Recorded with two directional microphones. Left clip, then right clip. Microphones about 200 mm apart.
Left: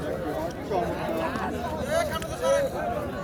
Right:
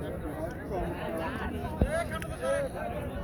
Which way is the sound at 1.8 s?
60° left (ahead or behind).